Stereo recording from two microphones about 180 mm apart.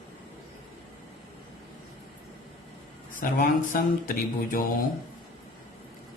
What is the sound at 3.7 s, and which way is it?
Speech, 50° left (ahead or behind).